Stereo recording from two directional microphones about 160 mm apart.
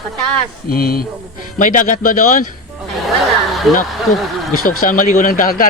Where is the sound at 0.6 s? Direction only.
65° left (ahead or behind).